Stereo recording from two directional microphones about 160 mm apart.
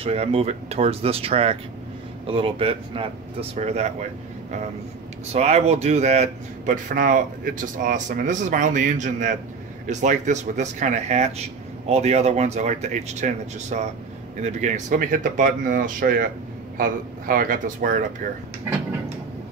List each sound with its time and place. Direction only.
0.0 s speech: 40° right (ahead or behind)
5.3 s speech: 40° right (ahead or behind)